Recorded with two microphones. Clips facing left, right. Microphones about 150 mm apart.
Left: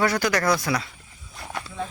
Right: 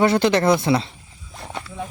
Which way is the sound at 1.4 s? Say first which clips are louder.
Right 1 dB; 25° right (ahead or behind).